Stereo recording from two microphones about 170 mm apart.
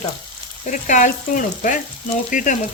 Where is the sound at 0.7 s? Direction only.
45° left (ahead or behind).